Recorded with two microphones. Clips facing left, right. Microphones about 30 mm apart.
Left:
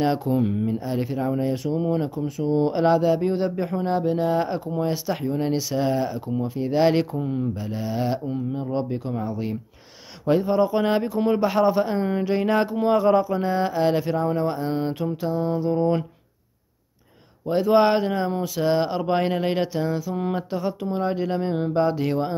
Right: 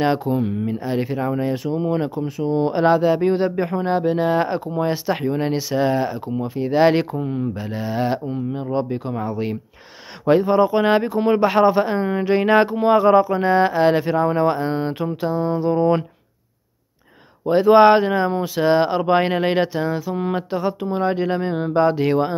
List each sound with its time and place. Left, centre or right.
0.0 s speech: centre
14.7 s speech: centre
17.5 s speech: right